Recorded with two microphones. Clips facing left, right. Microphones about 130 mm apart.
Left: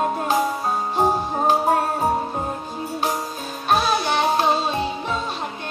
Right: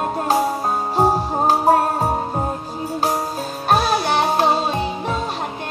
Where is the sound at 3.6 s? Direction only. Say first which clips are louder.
Right 2 dB; 40° right (ahead or behind).